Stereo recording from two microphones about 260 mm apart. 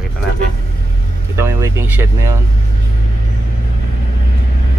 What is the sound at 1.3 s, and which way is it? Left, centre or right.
Speech, centre.